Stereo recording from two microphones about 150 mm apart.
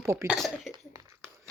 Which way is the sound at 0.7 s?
20° right (ahead or behind).